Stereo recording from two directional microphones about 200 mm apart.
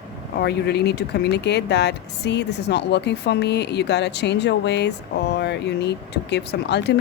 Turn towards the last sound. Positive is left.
turn(degrees=60)  # may be behind; listen again after turning